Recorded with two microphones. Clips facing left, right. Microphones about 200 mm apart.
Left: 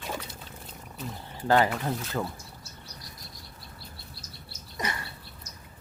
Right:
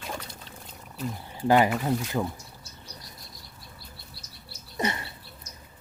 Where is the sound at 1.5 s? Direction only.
15° right (ahead or behind).